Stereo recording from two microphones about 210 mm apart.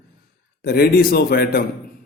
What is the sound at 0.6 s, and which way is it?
A man's voice, 45° left (ahead or behind).